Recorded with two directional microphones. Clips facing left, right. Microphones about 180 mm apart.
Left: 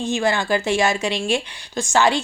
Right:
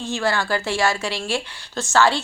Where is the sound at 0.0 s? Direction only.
20° left (ahead or behind).